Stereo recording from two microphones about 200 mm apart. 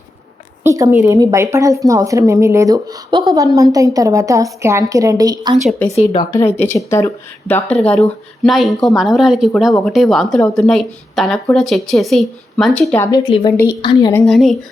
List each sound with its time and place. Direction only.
0.6 s a woman's voice: 15° right (ahead or behind)
5.8 s speech: 10° left (ahead or behind)
14.1 s speech: 10° left (ahead or behind)